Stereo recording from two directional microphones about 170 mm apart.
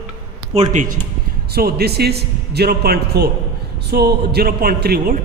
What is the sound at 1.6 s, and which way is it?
A man's voice, 65° right (ahead or behind).